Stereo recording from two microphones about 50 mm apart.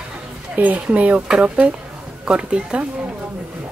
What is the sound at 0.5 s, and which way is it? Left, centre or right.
Speech, right.